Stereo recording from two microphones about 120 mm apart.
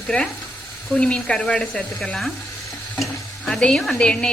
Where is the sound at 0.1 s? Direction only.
10° left (ahead or behind).